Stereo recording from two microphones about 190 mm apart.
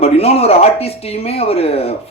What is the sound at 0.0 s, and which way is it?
Speech, 30° left (ahead or behind).